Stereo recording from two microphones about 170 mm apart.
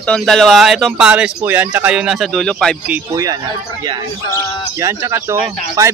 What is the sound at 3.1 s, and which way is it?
Speech, 20° right (ahead or behind).